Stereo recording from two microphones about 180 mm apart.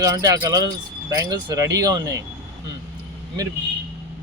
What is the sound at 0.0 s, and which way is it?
Speech, 20° right (ahead or behind).